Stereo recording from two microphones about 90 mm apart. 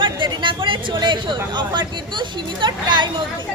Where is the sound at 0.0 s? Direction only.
65° right (ahead or behind).